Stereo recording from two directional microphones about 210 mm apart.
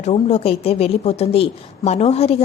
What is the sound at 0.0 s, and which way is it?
Speech, 30° left (ahead or behind).